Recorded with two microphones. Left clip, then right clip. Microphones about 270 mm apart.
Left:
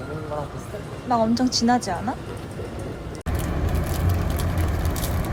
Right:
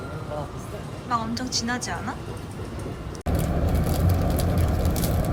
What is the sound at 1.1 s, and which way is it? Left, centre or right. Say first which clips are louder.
A woman's voice: left 6 dB; centre.